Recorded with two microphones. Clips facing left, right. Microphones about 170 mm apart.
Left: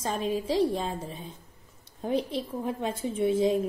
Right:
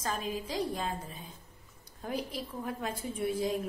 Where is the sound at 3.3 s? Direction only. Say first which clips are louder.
Left 8 dB; 20° left (ahead or behind).